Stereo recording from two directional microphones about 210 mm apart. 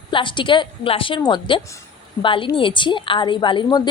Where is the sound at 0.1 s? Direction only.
25° left (ahead or behind).